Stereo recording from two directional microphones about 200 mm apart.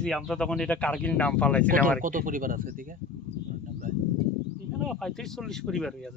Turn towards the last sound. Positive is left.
turn(degrees=0)  # may be behind; listen again after turning